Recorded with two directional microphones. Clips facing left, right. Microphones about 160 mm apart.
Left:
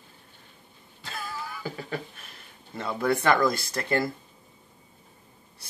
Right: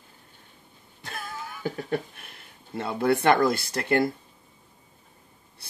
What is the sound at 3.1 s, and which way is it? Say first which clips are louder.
Speech: right 2 dB; 60° right (ahead or behind).